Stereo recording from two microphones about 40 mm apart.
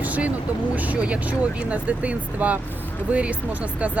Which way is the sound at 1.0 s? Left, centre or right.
Right.